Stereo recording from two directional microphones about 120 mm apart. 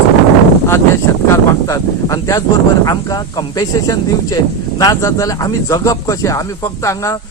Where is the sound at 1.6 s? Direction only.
25° left (ahead or behind).